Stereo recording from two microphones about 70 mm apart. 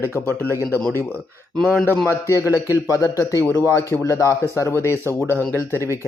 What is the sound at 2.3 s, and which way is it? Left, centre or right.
Speech, left.